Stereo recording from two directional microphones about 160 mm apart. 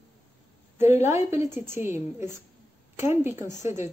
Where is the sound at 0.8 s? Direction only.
15° right (ahead or behind).